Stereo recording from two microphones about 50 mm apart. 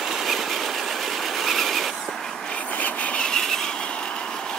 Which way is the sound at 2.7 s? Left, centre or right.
Left.